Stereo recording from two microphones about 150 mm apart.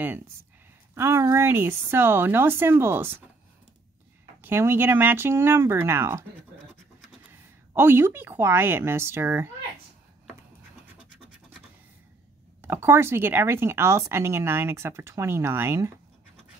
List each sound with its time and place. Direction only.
0.9 s speech: 20° right (ahead or behind)
4.4 s speech: 15° right (ahead or behind)
7.7 s speech: 15° right (ahead or behind)
12.6 s speech: 15° right (ahead or behind)